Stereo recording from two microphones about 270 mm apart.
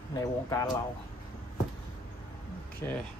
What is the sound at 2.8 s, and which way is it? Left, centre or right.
Speech, centre.